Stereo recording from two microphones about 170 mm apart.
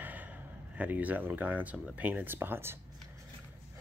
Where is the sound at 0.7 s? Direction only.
10° right (ahead or behind).